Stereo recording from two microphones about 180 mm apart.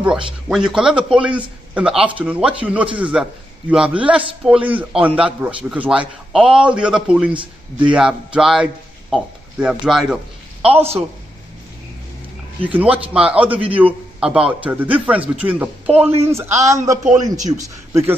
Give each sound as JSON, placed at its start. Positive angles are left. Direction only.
{"t": 0.0, "sound": "a man's voice", "side_deg": -5}
{"t": 7.8, "sound": "a sound", "side_deg": -5}
{"t": 9.1, "sound": "a man's voice", "side_deg": -5}
{"t": 12.6, "sound": "a man's voice", "side_deg": -10}